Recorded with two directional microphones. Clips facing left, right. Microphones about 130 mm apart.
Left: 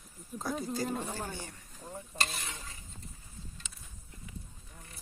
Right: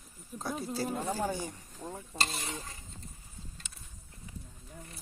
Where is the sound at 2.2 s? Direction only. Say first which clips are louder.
Right 3 dB; 30° right (ahead or behind).